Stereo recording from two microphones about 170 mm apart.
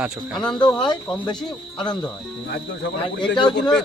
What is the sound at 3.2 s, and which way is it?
Speech, 25° left (ahead or behind).